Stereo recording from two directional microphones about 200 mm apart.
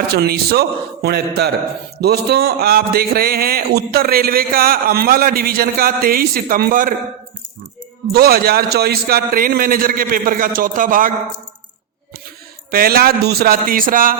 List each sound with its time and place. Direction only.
0.1 s speech: 50° right (ahead or behind)
8.1 s speech: 50° right (ahead or behind)
12.7 s speech: 50° right (ahead or behind)